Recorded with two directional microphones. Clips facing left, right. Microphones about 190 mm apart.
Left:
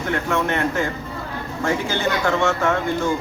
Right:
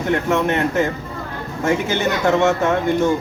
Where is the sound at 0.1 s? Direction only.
20° right (ahead or behind).